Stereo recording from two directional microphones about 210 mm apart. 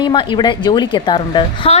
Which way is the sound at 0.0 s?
25° left (ahead or behind).